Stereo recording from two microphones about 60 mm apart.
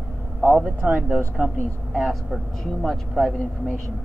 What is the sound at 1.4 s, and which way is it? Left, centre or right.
Speech, centre.